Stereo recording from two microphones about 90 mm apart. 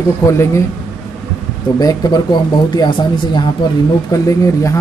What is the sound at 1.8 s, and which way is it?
Speech, 45° left (ahead or behind).